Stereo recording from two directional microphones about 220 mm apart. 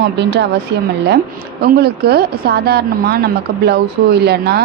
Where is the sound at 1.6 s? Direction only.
45° right (ahead or behind).